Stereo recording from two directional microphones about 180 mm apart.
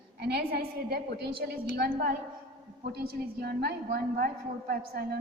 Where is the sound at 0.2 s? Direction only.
60° right (ahead or behind).